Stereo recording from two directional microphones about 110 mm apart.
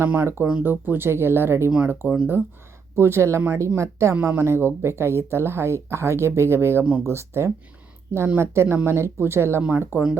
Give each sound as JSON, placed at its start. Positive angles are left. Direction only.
{"t": 0.0, "sound": "speech", "side_deg": -20}